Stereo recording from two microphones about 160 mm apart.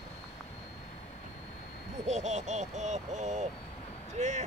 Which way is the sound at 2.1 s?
45° right (ahead or behind).